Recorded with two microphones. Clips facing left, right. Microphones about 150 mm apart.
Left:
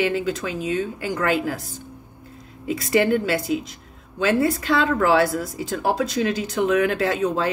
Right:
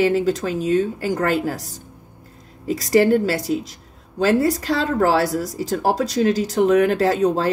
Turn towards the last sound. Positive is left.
turn(degrees=-35)  # may be behind; listen again after turning